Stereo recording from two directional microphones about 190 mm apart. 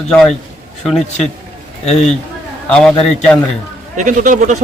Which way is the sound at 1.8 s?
35° left (ahead or behind).